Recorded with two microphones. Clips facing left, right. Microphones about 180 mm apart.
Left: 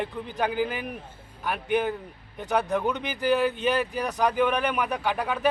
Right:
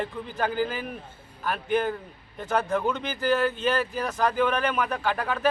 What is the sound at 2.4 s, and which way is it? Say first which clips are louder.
A man's voice: even; 15° left (ahead or behind).